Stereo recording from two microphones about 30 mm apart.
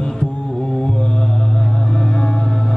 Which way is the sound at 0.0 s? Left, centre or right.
Left.